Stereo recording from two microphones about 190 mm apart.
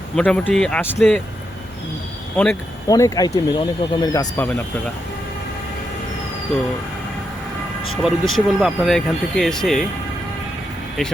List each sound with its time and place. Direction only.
0.2 s speech: 5° left (ahead or behind)
2.3 s speech: 5° left (ahead or behind)
2.8 s speech: 20° left (ahead or behind)
7.9 s speech: centre (ahead or behind)